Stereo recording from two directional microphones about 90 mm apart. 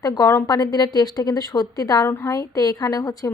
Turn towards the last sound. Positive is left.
turn(degrees=40)  # may be behind; listen again after turning